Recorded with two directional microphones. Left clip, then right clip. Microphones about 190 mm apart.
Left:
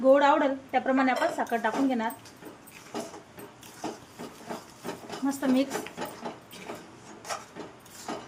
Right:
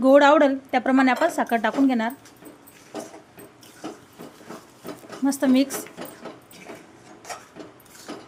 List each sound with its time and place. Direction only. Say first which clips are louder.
0.0 s a woman's voice: right 6 dB; 60° right (ahead or behind)
5.2 s speech: right 6 dB; 50° right (ahead or behind)